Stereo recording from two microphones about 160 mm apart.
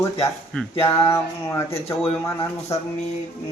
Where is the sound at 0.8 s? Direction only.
15° left (ahead or behind).